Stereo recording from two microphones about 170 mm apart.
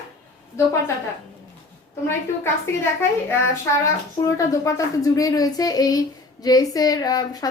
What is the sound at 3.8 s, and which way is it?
Speech, 20° left (ahead or behind).